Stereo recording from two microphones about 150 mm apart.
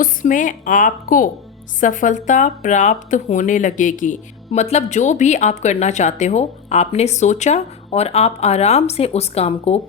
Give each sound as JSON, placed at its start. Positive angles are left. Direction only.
{"t": 0.0, "sound": "a woman's voice", "side_deg": 60}